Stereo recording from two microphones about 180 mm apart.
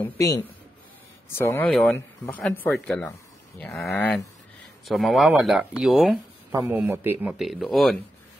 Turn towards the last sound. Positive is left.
turn(degrees=0)  # may be behind; listen again after turning